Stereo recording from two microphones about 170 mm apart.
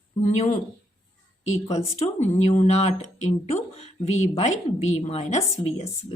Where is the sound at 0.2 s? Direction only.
45° left (ahead or behind).